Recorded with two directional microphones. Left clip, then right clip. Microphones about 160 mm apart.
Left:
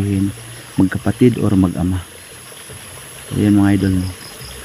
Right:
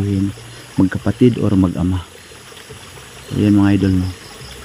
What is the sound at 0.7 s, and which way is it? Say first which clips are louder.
Speech: even; centre (ahead or behind).